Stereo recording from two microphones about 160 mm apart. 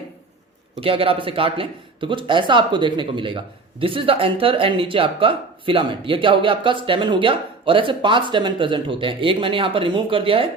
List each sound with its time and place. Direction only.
0.8 s speech: 35° right (ahead or behind)